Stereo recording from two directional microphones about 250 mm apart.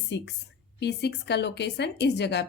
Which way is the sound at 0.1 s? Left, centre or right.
Left.